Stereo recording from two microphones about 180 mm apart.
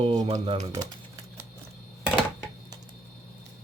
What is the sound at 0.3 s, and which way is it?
Speech, 20° right (ahead or behind).